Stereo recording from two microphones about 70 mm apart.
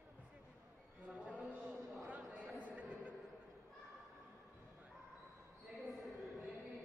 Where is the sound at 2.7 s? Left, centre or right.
Right.